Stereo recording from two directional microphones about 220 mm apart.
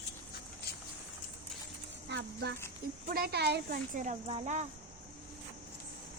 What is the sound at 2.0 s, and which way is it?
Speech, 50° right (ahead or behind).